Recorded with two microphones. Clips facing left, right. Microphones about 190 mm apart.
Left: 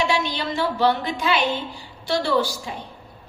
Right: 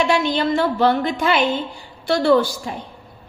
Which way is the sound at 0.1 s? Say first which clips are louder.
Right 6 dB; 50° right (ahead or behind).